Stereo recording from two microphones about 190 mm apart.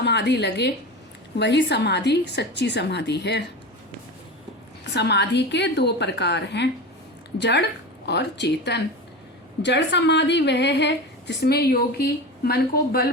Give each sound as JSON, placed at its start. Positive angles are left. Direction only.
{"t": 0.0, "sound": "a woman's voice", "side_deg": 65}
{"t": 4.8, "sound": "a woman's voice", "side_deg": 65}